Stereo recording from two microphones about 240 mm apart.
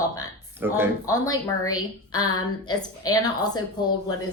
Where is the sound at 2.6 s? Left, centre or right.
Centre.